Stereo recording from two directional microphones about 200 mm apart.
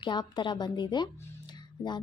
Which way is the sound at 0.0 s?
20° left (ahead or behind).